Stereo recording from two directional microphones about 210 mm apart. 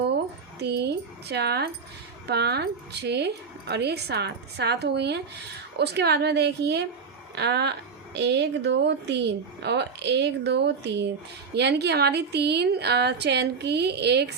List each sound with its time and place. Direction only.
0.6 s a woman's voice: 50° right (ahead or behind)